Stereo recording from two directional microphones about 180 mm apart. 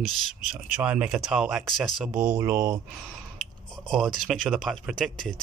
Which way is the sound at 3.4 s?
Centre (ahead or behind).